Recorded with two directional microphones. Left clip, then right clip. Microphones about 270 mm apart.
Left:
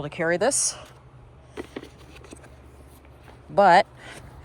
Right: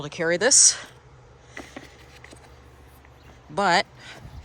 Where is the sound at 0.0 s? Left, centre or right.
Centre.